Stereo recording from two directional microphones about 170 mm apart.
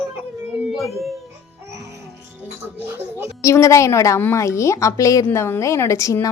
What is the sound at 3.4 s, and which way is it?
A woman's voice, 15° left (ahead or behind).